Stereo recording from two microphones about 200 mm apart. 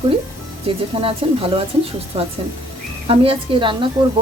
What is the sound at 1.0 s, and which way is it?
Speech, 30° right (ahead or behind).